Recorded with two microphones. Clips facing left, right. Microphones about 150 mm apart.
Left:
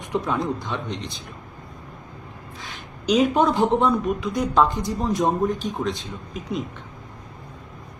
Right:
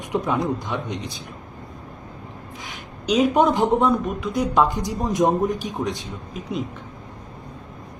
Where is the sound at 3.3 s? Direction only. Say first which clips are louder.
Right 1 dB; 20° right (ahead or behind).